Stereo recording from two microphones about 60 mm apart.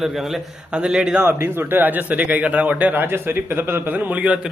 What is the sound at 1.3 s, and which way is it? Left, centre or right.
A man's voice, right.